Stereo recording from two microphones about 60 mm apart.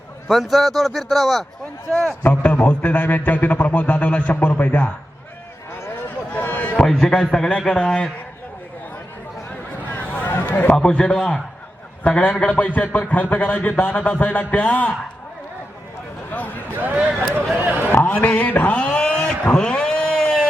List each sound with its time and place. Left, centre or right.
0.3 s a man's voice: centre
1.9 s a man's voice: left
6.3 s a sound: left
6.7 s a man's voice: centre
9.5 s a sound: left
10.8 s a man's voice: centre
12.2 s a man's voice: left
16.9 s speech: right
17.6 s a man's voice: right
17.9 s a sound: left; by 20.4 s centre